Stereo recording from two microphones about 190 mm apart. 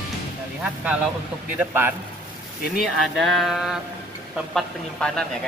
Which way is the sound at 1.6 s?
10° right (ahead or behind).